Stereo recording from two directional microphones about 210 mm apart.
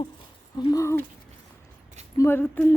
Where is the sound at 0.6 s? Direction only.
15° left (ahead or behind).